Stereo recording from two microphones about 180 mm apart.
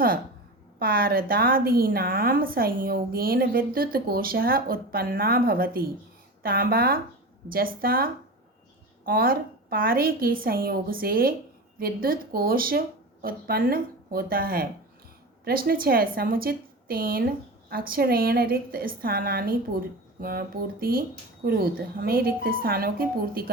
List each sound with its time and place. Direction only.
0.8 s a woman's voice: 55° right (ahead or behind)